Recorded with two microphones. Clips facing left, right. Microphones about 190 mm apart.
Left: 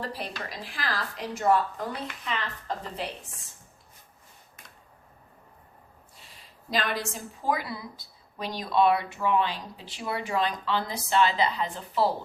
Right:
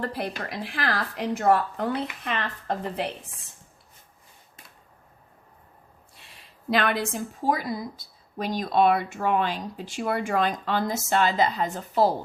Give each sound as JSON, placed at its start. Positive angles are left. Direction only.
{"t": 0.0, "sound": "a woman's voice", "side_deg": -55}
{"t": 6.7, "sound": "speech", "side_deg": -60}